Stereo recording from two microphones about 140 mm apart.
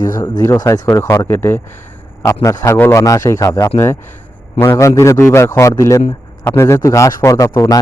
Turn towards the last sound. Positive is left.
turn(degrees=25)  # may be behind; listen again after turning